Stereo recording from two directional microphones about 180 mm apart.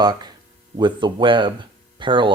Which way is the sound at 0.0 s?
20° right (ahead or behind).